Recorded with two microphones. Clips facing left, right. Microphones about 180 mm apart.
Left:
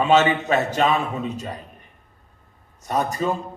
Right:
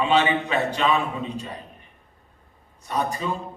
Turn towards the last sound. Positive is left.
turn(degrees=45)  # may be behind; listen again after turning